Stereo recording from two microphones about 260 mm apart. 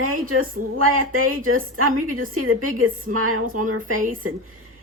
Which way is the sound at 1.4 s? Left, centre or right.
Right.